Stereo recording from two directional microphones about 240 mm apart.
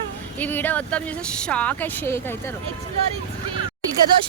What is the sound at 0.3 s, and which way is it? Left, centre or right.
A woman's voice, centre.